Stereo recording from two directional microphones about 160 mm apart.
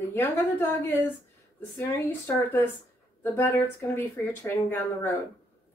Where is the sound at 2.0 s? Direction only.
15° left (ahead or behind).